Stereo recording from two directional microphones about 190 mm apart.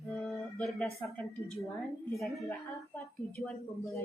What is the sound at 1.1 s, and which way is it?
Speech, 5° left (ahead or behind).